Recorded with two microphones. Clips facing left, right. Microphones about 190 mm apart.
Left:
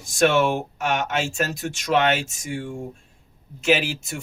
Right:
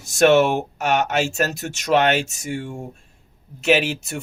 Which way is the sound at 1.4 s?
40° right (ahead or behind).